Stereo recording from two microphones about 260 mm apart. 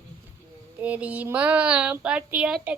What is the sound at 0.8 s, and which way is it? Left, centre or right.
A child's voice, centre.